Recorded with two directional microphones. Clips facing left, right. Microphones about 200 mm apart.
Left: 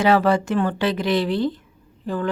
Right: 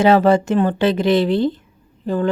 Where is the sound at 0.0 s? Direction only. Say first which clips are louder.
Right 4 dB; 25° right (ahead or behind).